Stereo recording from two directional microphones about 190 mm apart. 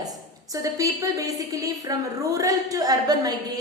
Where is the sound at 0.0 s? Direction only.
20° right (ahead or behind).